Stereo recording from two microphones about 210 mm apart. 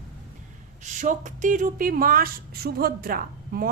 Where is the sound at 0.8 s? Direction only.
35° right (ahead or behind).